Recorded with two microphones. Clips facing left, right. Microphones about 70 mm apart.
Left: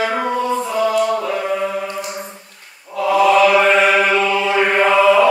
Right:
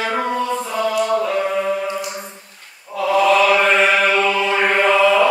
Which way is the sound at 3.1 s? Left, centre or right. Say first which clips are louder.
Left 2 dB; centre.